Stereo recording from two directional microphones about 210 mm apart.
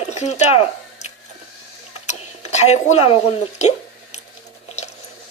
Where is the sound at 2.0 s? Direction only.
30° left (ahead or behind).